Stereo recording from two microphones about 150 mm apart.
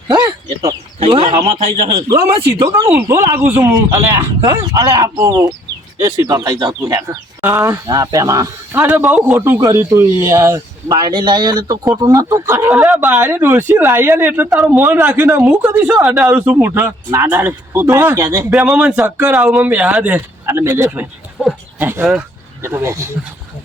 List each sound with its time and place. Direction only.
0.1 s a sound: 30° right (ahead or behind)
0.9 s speech: 40° right (ahead or behind)
2.0 s speech: 20° right (ahead or behind)
18.5 s speech: 5° right (ahead or behind)
21.4 s a sound: 10° right (ahead or behind)
22.6 s speech: 15° right (ahead or behind)